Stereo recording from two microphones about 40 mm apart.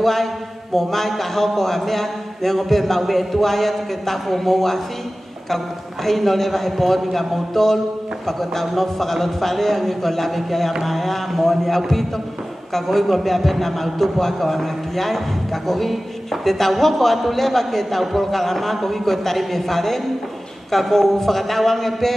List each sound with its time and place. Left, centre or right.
0.0 s a man's voice: centre
6.0 s a man's voice: centre